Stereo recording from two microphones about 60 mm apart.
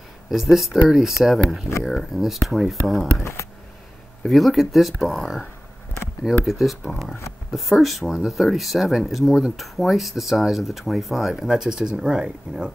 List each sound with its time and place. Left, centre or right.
0.3 s speech: centre
3.2 s speech: left
4.2 s speech: centre